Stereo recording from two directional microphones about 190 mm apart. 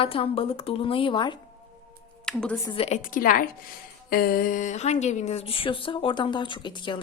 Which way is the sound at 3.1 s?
45° left (ahead or behind).